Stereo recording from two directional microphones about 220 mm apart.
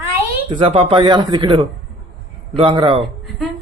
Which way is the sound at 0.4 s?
25° right (ahead or behind).